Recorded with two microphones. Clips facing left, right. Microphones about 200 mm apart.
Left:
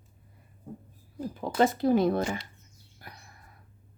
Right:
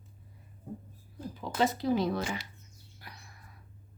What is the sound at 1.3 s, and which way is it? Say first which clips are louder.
Speech: left 5 dB; 50° left (ahead or behind).